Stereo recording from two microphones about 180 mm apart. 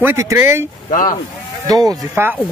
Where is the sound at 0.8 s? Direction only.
50° left (ahead or behind).